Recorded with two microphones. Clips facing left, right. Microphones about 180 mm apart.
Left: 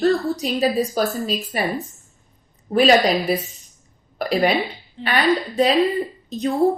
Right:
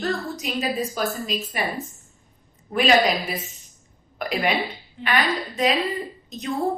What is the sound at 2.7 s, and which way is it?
A woman's voice, 35° left (ahead or behind).